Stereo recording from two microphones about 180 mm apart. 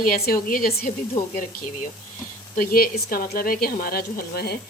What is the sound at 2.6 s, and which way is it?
Speech, 55° left (ahead or behind).